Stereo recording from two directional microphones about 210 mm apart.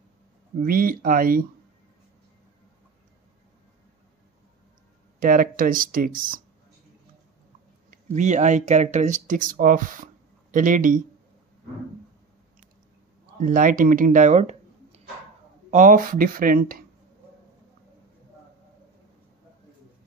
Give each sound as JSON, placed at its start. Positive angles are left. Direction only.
{"t": 0.6, "sound": "speech", "side_deg": -40}
{"t": 5.2, "sound": "speech", "side_deg": -40}
{"t": 7.9, "sound": "speech", "side_deg": -35}
{"t": 13.4, "sound": "speech", "side_deg": -40}